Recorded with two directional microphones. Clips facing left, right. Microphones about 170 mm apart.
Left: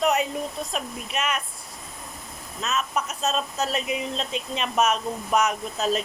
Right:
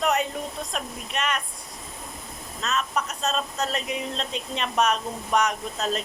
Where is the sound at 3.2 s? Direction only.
5° left (ahead or behind).